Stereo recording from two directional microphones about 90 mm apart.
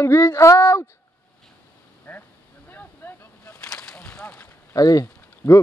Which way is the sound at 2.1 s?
15° left (ahead or behind).